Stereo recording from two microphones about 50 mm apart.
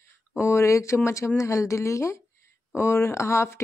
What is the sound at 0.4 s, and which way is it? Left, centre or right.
Speech, left.